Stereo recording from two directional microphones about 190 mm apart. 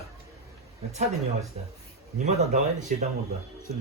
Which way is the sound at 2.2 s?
40° right (ahead or behind).